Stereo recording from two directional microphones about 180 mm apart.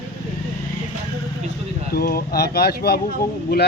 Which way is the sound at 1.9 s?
55° left (ahead or behind).